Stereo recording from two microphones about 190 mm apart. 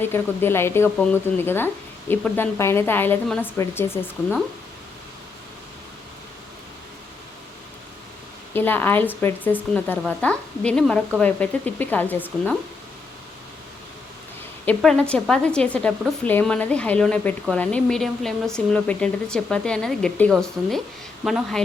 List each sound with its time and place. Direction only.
0.0 s speech: 10° left (ahead or behind)
8.5 s a woman's voice: 10° left (ahead or behind)
14.6 s a woman's voice: 5° left (ahead or behind)